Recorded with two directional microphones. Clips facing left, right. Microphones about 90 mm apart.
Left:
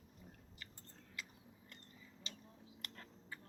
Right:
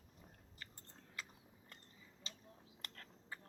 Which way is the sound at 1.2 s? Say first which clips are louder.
Even; 35° right (ahead or behind).